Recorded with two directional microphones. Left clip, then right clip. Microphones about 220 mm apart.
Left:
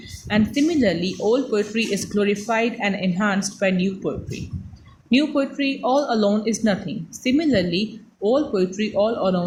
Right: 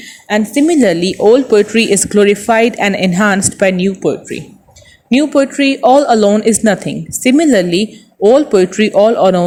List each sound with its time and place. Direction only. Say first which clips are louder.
0.3 s speech: right 9 dB; 35° right (ahead or behind)